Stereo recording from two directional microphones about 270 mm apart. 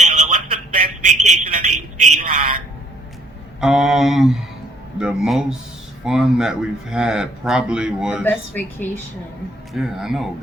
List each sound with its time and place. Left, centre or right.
0.0 s telephone: right
1.2 s a sound: right
2.1 s a man's voice: right
3.6 s speech: centre